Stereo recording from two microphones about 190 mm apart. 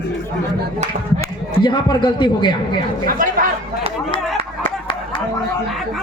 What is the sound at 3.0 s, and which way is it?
Speech, 45° right (ahead or behind).